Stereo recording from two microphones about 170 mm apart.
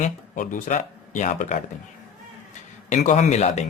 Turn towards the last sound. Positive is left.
turn(degrees=40)  # may be behind; listen again after turning